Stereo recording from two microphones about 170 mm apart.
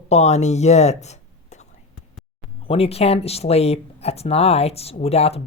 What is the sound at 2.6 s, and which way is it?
Speech, 35° left (ahead or behind).